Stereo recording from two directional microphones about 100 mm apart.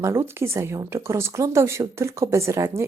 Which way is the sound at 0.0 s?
25° right (ahead or behind).